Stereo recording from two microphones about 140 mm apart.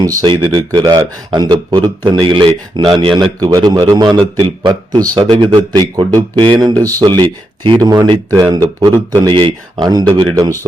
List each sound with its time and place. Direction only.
0.2 s speech: 35° right (ahead or behind)
5.1 s speech: 35° right (ahead or behind)